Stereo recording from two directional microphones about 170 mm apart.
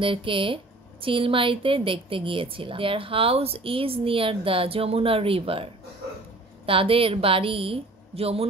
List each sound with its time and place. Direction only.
0.0 s a woman's voice: 30° right (ahead or behind)